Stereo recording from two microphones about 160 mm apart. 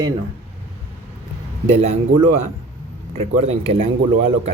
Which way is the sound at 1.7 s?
40° right (ahead or behind).